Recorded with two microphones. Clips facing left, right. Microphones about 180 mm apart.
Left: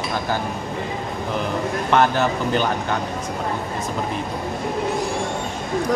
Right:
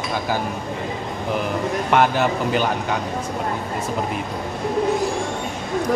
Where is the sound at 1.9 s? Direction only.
10° right (ahead or behind).